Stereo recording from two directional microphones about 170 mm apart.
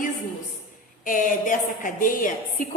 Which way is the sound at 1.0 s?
50° left (ahead or behind).